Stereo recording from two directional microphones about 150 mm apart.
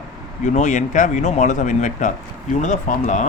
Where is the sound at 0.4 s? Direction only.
50° left (ahead or behind).